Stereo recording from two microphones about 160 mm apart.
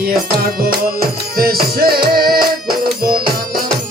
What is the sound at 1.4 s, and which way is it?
Music, 70° right (ahead or behind).